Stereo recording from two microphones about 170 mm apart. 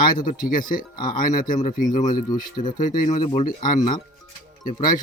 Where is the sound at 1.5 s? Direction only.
50° left (ahead or behind).